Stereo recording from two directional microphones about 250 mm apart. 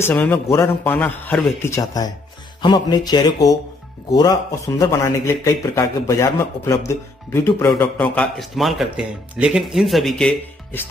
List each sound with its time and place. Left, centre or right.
0.0 s a man's voice: centre